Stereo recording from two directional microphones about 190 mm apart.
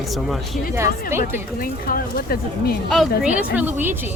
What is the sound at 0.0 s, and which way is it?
Speech, centre (ahead or behind).